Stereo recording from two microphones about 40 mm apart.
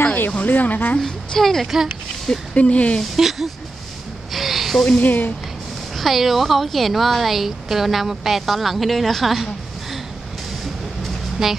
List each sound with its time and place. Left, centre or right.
0.0 s a sound: left
0.5 s speech: left
0.9 s a woman's voice: centre
1.4 s speech: centre
2.5 s speech: left
3.2 s speech: centre
4.3 s a sound: centre
4.9 s speech: left
5.9 s speech: centre
11.4 s a woman's voice: centre